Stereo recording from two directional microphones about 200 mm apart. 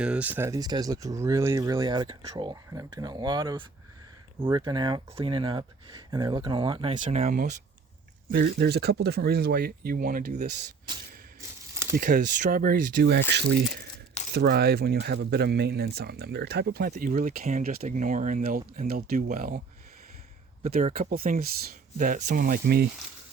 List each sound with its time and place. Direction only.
0.0 s speech: 5° right (ahead or behind); by 7.0 s 25° right (ahead or behind)
7.0 s speech: 35° right (ahead or behind)
8.3 s speech: 50° right (ahead or behind)
11.3 s a sound: 15° right (ahead or behind)
11.9 s speech: 40° right (ahead or behind)
20.8 s speech: 40° right (ahead or behind)